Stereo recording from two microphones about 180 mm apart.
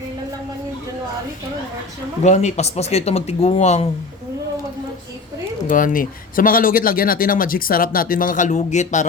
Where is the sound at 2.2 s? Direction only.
40° left (ahead or behind).